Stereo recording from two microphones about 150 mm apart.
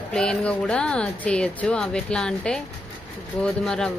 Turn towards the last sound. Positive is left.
turn(degrees=5)  # may be behind; listen again after turning